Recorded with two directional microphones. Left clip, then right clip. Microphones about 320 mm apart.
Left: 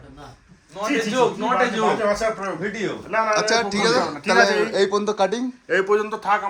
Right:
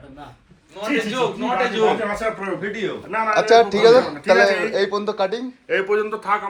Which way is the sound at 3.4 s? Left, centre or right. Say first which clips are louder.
Right 6 dB; centre.